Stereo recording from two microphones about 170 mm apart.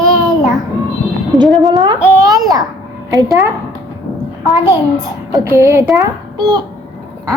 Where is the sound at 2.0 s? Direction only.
20° right (ahead or behind).